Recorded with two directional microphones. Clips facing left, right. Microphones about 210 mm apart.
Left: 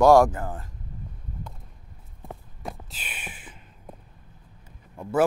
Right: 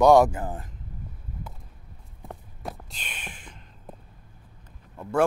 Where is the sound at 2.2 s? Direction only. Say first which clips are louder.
Even; centre (ahead or behind).